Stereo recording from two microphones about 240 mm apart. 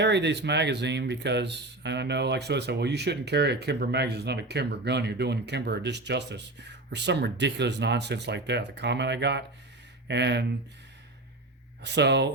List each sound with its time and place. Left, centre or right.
0.0 s speech: right
11.8 s speech: right